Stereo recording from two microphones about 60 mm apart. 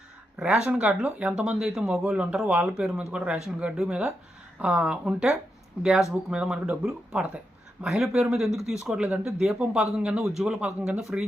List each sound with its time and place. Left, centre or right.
0.3 s speech: centre
2.1 s speech: centre